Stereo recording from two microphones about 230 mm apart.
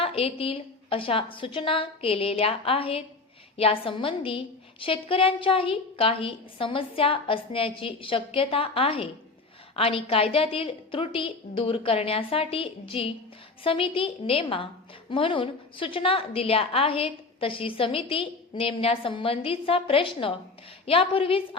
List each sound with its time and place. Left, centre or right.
0.0 s a woman's voice: left